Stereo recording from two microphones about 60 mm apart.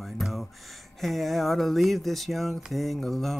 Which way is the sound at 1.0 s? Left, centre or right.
Centre.